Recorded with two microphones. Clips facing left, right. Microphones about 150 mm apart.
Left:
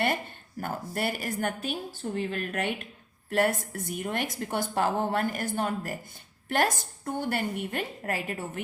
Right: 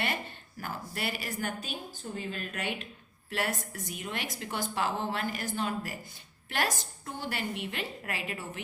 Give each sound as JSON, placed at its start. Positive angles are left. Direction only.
{"t": 0.6, "sound": "a woman's voice", "side_deg": 50}